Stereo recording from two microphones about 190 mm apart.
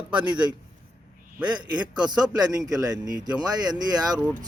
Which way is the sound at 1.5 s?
25° right (ahead or behind).